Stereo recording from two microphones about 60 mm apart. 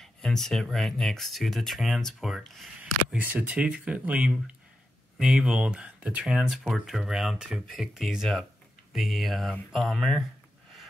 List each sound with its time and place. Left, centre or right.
0.0 s speech: centre
2.8 s speech: right
6.7 s speech: centre